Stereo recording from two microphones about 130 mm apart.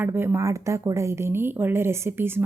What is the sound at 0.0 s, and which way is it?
A woman's voice, 20° right (ahead or behind).